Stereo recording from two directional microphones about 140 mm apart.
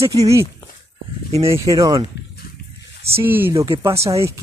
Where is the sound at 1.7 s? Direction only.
25° right (ahead or behind).